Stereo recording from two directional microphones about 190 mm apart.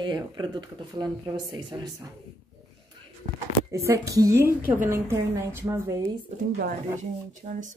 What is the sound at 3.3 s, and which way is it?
Speech, 15° right (ahead or behind).